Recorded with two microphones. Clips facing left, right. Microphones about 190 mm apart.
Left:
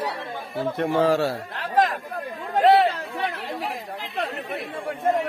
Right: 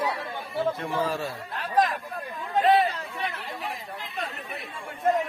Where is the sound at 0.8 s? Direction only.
70° left (ahead or behind).